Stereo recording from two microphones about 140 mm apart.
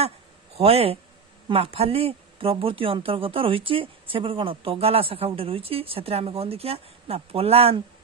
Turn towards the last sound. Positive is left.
turn(degrees=-45)  # may be behind; listen again after turning